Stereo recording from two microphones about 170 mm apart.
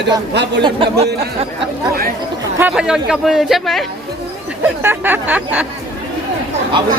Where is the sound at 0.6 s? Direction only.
35° right (ahead or behind).